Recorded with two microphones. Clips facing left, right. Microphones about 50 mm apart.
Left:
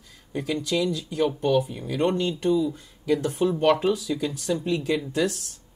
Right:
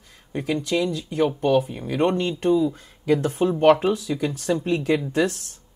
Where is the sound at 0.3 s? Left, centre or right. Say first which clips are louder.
Right 2 dB; right.